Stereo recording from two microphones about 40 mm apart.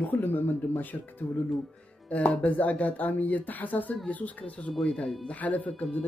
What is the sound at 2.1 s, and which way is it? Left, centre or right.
Speech, left.